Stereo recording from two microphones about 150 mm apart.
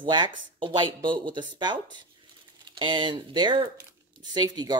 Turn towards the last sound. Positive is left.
turn(degrees=-25)  # may be behind; listen again after turning